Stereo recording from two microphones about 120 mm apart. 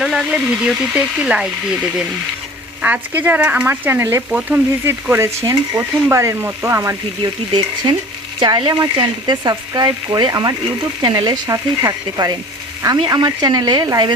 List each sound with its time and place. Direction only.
0.0 s speech: centre (ahead or behind); by 5.3 s 20° right (ahead or behind)
5.4 s frying: 25° right (ahead or behind)
7.2 s speech: 40° right (ahead or behind)